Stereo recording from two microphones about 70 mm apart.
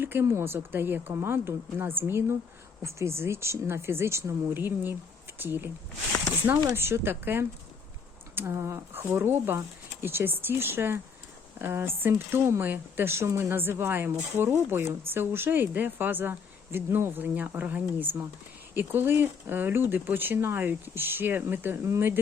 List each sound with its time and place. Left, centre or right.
0.0 s speech: right
6.7 s speech: right